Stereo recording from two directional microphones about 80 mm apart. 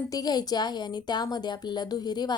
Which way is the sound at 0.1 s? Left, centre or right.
Left.